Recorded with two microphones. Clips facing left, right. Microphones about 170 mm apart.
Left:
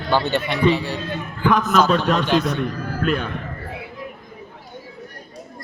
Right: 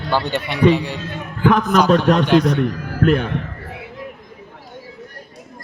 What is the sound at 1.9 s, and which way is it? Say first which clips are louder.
A man's voice: right 5 dB; 50° right (ahead or behind).